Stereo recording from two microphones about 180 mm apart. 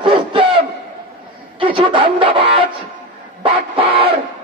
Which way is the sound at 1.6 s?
30° right (ahead or behind).